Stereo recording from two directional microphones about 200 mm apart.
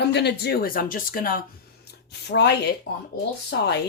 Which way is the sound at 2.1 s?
55° left (ahead or behind).